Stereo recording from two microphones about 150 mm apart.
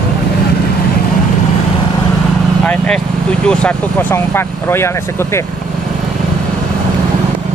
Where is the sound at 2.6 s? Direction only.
10° left (ahead or behind).